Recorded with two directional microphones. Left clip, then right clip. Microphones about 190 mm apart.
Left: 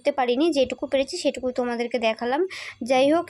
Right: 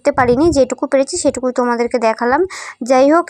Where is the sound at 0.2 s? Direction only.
5° right (ahead or behind).